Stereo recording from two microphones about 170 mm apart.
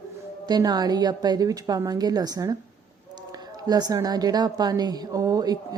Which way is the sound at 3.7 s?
25° right (ahead or behind).